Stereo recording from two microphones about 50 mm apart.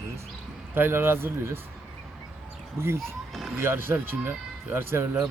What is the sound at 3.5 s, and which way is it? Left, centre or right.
A man's voice, right.